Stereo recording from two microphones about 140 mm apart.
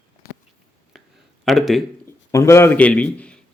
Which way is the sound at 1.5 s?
Centre (ahead or behind).